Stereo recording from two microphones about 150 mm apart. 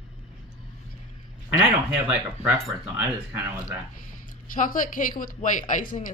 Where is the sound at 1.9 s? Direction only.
10° right (ahead or behind).